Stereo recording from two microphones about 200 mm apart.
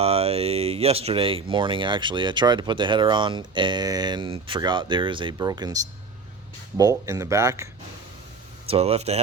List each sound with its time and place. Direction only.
0.0 s speech: 30° right (ahead or behind); by 7.7 s 15° right (ahead or behind)
8.6 s speech: 30° right (ahead or behind)